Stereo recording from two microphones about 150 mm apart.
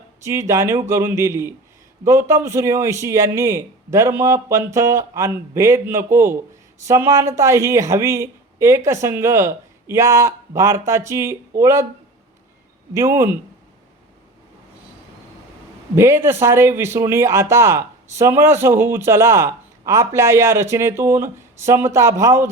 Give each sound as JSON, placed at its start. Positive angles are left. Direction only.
{"t": 0.3, "sound": "a man's voice", "side_deg": -20}
{"t": 12.9, "sound": "a man's voice", "side_deg": -20}
{"t": 16.0, "sound": "a man's voice", "side_deg": -15}